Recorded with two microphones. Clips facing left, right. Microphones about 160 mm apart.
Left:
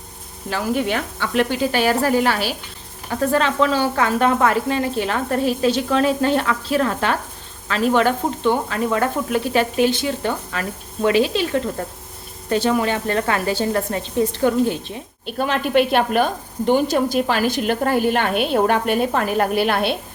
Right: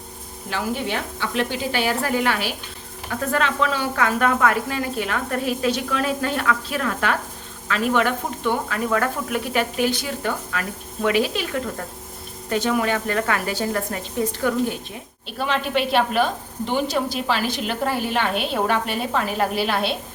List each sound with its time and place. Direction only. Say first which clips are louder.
0.5 s speech: left 2 dB; 40° left (ahead or behind)
0.9 s a woman's voice: left 3 dB; 55° left (ahead or behind); by 14.9 s 30° left (ahead or behind)
15.4 s a woman's voice: left 5 dB; 50° left (ahead or behind)